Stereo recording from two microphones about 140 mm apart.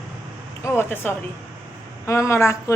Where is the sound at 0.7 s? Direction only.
15° left (ahead or behind).